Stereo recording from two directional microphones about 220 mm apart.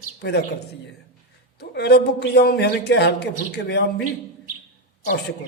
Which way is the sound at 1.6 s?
50° left (ahead or behind).